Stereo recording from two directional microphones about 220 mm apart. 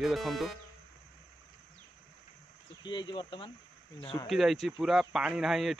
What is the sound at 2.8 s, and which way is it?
Speech, 20° left (ahead or behind).